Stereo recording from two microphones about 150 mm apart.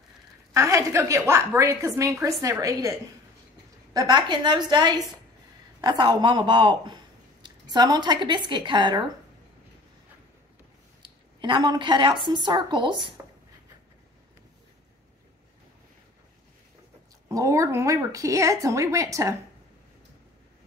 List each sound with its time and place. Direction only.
0.5 s speech: 20° right (ahead or behind)
11.0 s a woman's voice: 30° right (ahead or behind)
17.3 s speech: 20° right (ahead or behind)